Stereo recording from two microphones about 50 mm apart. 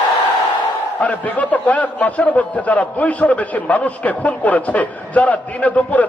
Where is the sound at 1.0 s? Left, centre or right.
Left.